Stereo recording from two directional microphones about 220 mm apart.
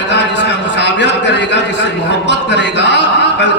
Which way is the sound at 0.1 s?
50° left (ahead or behind).